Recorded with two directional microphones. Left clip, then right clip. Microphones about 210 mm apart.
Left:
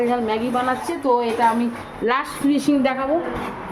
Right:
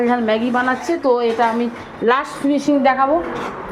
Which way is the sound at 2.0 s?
5° right (ahead or behind).